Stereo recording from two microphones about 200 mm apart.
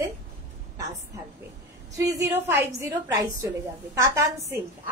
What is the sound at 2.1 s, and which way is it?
A woman's voice, 15° right (ahead or behind).